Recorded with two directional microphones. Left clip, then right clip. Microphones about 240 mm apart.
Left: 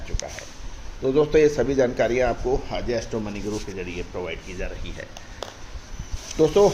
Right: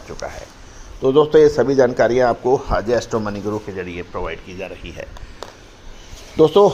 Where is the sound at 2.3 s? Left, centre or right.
Right.